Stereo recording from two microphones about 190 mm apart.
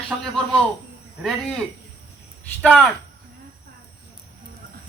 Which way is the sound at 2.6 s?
Centre (ahead or behind).